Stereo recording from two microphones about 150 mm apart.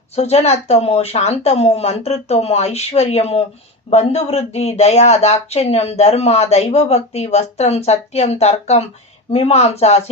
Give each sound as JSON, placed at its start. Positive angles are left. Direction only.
{"t": 0.2, "sound": "speech", "side_deg": 45}